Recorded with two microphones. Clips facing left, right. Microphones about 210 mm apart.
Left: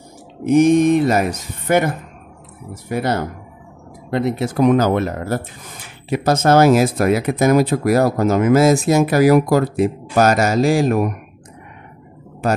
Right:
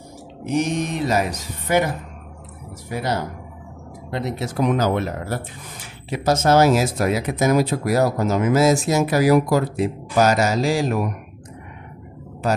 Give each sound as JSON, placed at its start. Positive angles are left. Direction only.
{"t": 0.5, "sound": "speech", "side_deg": 55}